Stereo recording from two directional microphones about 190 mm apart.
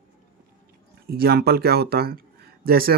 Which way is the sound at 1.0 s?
55° right (ahead or behind).